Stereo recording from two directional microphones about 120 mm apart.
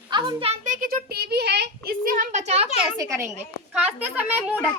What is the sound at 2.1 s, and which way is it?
Speech, 85° right.